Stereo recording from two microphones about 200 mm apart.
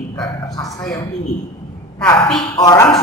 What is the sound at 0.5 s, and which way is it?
Speech, 15° left (ahead or behind).